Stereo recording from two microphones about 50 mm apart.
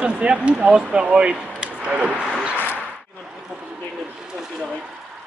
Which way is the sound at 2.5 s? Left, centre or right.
Left.